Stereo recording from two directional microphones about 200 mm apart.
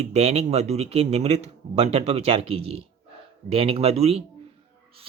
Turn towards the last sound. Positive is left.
turn(degrees=-30)  # may be behind; listen again after turning